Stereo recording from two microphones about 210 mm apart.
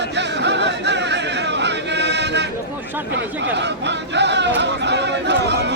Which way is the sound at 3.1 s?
55° right (ahead or behind).